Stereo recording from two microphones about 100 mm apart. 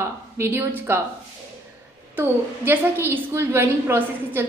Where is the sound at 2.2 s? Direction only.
20° right (ahead or behind).